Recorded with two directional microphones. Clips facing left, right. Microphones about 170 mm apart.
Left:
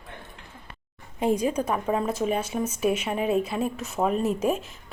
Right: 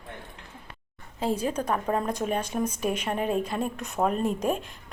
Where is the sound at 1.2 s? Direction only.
15° left (ahead or behind).